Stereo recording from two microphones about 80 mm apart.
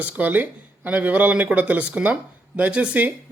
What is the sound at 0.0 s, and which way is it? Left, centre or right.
Speech, right.